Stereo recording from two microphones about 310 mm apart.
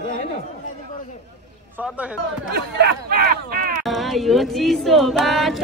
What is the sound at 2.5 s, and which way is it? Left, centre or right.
Speech, right.